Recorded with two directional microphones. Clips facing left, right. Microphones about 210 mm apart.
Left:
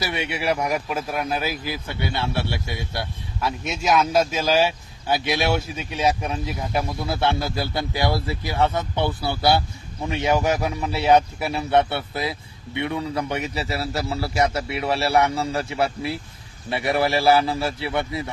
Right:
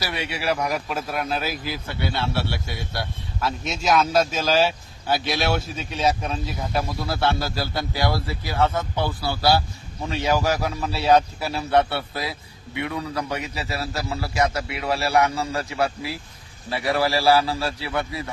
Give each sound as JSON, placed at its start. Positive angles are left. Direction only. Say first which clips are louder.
{"t": 0.1, "sound": "a man's voice", "louder": "even", "side_deg": 20}